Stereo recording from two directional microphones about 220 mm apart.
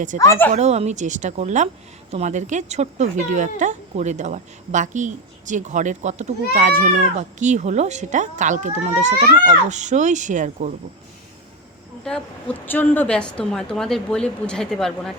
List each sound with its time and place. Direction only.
0.2 s a woman's voice: 10° left (ahead or behind)
0.5 s a woman's voice: 30° right (ahead or behind)
12.6 s a woman's voice: 10° left (ahead or behind)